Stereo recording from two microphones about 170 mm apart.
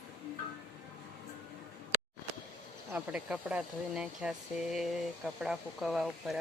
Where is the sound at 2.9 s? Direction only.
10° right (ahead or behind).